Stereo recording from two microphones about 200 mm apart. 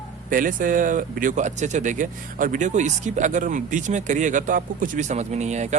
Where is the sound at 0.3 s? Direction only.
40° right (ahead or behind).